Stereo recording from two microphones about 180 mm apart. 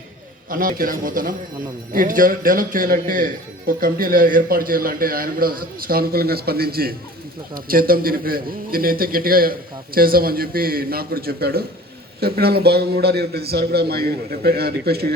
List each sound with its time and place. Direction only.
0.5 s a man's voice: 50° right (ahead or behind)